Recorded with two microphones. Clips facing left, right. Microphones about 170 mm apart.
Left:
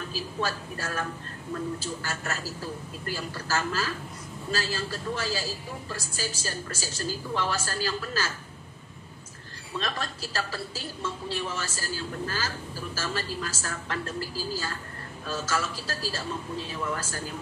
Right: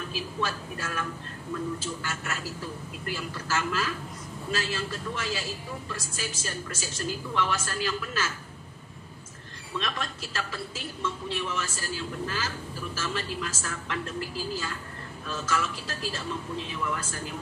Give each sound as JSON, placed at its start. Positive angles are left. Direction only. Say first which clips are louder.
{"t": 0.1, "sound": "a woman's voice", "louder": "left 2 dB", "side_deg": 40}
{"t": 9.8, "sound": "a woman's voice", "louder": "left 1 dB", "side_deg": 35}